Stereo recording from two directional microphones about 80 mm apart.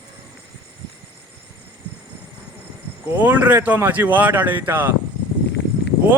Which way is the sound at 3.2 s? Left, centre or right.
Right.